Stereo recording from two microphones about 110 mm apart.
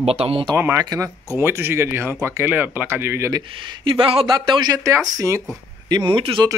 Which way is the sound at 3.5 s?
50° right (ahead or behind).